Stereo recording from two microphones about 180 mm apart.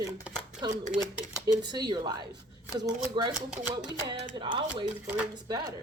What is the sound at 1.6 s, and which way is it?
Speech, 25° right (ahead or behind).